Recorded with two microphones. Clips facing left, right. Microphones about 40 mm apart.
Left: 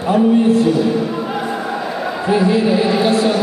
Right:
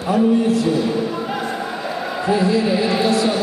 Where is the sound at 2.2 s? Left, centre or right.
Left.